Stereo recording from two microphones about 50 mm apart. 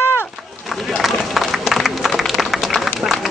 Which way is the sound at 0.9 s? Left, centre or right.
Centre.